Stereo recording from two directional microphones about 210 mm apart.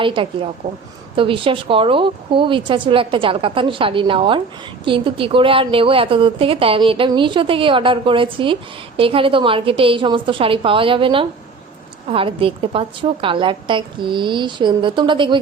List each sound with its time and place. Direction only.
0.0 s a woman's voice: 25° right (ahead or behind)